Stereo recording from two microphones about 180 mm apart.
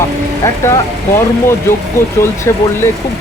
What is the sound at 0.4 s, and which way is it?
Speech, 15° left (ahead or behind).